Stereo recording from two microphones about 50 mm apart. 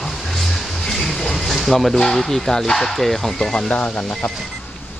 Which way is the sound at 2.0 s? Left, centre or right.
Centre.